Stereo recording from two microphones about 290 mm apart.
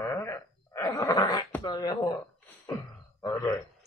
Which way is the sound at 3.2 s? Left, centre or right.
Centre.